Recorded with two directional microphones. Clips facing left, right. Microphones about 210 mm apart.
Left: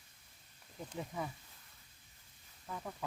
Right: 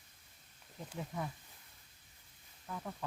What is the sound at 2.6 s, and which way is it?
Speech, 5° left (ahead or behind).